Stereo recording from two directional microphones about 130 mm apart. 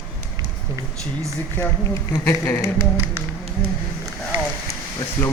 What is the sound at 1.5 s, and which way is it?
Speech, 15° left (ahead or behind).